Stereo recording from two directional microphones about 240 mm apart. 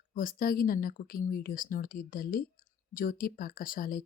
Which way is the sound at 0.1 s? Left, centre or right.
Left.